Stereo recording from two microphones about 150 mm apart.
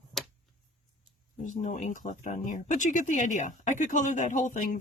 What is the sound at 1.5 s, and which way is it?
Speech, 55° left (ahead or behind).